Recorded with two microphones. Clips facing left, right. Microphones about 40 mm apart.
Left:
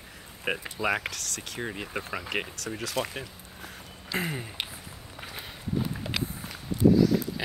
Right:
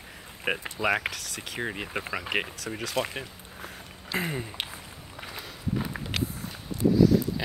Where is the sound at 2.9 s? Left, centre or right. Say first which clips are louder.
Right 2 dB; right.